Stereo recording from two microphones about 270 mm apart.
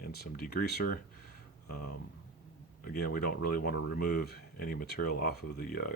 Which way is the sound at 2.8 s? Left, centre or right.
Left.